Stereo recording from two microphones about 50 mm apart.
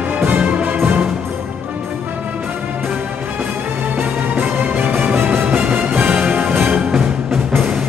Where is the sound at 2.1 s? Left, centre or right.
Right.